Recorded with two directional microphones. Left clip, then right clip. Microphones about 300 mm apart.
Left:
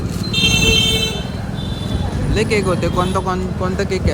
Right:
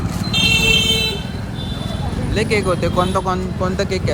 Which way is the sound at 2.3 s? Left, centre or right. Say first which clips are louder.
Left 1 dB; centre.